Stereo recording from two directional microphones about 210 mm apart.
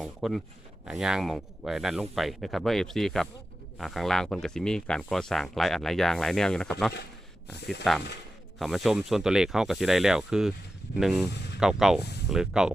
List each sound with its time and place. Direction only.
0.0 s speech: centre (ahead or behind)
7.5 s speech: 50° left (ahead or behind)
8.5 s speech: centre (ahead or behind)